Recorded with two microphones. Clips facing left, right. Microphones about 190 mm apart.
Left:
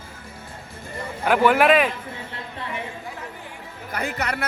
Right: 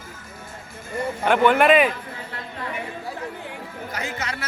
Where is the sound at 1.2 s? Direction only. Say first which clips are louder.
Even; 5° left (ahead or behind).